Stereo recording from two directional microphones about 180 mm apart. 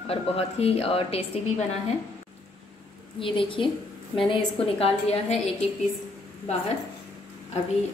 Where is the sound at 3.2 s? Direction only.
30° left (ahead or behind).